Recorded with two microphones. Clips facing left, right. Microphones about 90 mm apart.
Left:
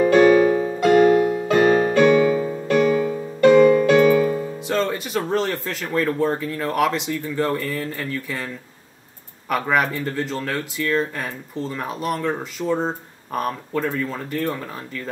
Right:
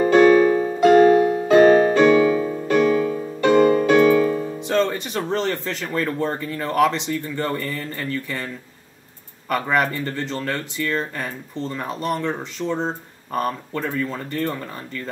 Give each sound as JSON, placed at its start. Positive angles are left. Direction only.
{"t": 0.0, "sound": "keyboard", "side_deg": -40}
{"t": 2.4, "sound": "music", "side_deg": -45}
{"t": 4.6, "sound": "speech", "side_deg": 0}
{"t": 9.5, "sound": "speech", "side_deg": 5}